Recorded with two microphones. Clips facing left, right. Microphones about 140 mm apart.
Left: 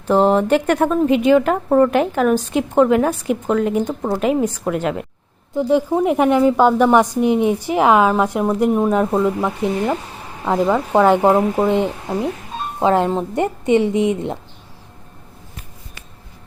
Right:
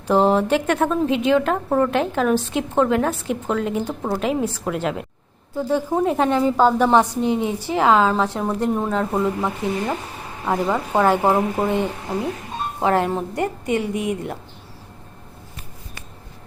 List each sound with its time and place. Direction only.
0.1 s a woman's voice: centre (ahead or behind)
5.5 s a woman's voice: 15° left (ahead or behind)